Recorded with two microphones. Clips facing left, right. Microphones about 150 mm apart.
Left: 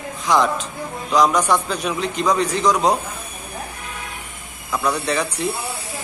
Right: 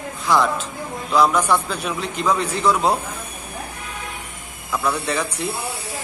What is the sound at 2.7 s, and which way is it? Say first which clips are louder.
Speech: even; 15° left (ahead or behind).